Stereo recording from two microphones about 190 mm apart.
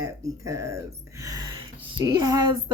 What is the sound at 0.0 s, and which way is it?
Speech, 15° right (ahead or behind).